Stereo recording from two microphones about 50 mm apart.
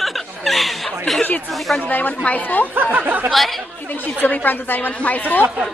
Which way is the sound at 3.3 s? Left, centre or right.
Centre.